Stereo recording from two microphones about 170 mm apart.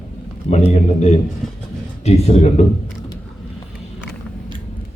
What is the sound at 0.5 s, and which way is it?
A man's voice, 40° left (ahead or behind).